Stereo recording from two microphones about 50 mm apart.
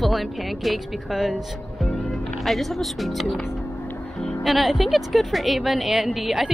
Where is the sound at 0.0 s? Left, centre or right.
Centre.